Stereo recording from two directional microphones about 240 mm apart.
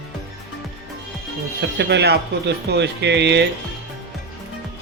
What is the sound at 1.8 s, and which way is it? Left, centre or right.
Speech, right.